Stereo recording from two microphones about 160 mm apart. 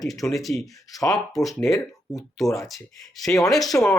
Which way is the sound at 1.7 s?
20° left (ahead or behind).